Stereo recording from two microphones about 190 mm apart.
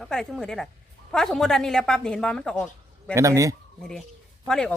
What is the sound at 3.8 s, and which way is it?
Speech, 5° left (ahead or behind).